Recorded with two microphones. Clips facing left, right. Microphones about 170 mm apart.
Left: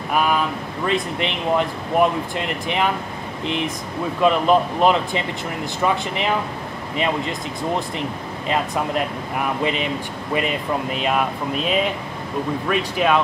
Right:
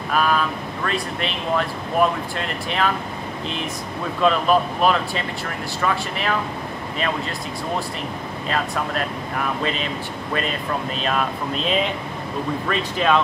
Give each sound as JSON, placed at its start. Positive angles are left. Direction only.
{"t": 0.1, "sound": "speech", "side_deg": 15}